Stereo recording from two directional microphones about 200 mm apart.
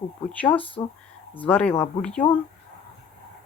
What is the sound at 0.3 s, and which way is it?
Speech, 10° left (ahead or behind).